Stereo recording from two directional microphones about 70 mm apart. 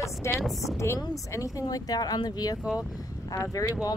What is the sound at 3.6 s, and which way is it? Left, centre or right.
Speech, left.